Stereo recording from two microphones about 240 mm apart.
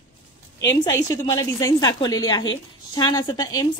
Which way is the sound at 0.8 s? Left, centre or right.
Centre.